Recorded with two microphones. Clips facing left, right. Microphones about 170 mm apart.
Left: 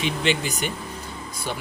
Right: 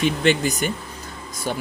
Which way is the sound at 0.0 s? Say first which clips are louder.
Right 5 dB; 45° right (ahead or behind).